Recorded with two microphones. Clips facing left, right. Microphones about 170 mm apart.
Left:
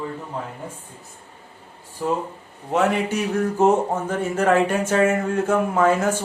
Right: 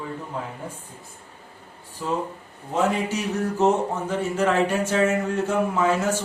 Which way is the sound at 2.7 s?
65° left (ahead or behind).